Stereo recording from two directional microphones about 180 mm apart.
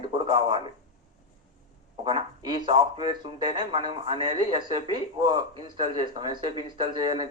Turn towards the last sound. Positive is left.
turn(degrees=-25)  # may be behind; listen again after turning